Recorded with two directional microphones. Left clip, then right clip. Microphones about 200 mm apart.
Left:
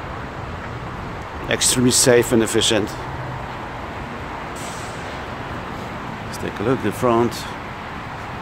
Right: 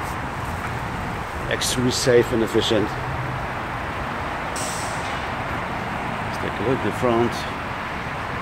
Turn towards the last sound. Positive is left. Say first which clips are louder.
# left 2 dB
turn(degrees=30)  # may be behind; listen again after turning